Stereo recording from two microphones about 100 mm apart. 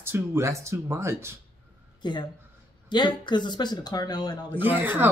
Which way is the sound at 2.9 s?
50° left (ahead or behind).